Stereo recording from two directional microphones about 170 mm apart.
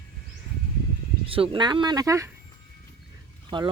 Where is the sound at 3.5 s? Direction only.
30° right (ahead or behind).